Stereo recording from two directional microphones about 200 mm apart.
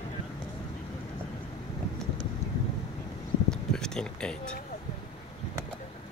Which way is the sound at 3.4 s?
5° left (ahead or behind).